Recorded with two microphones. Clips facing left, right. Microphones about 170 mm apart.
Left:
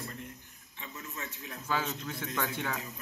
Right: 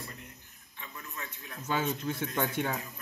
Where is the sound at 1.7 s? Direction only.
25° right (ahead or behind).